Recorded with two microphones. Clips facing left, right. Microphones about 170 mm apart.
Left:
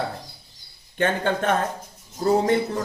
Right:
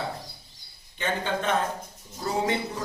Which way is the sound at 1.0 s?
55° left (ahead or behind).